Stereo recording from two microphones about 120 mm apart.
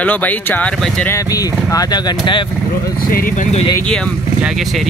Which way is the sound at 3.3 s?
90° left.